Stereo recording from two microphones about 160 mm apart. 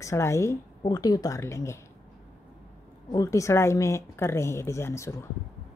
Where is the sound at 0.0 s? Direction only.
20° left (ahead or behind).